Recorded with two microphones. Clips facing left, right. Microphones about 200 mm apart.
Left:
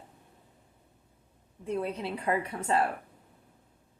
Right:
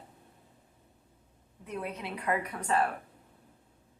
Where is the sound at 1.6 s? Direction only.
30° left (ahead or behind).